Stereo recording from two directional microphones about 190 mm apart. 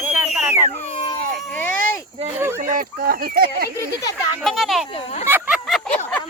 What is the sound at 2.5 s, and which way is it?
Speech, 45° right (ahead or behind).